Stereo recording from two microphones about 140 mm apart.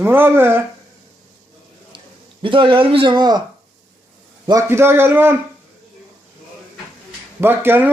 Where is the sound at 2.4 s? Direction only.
35° right (ahead or behind).